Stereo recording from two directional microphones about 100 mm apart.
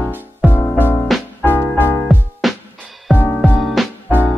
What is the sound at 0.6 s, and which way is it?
Music, 20° left (ahead or behind).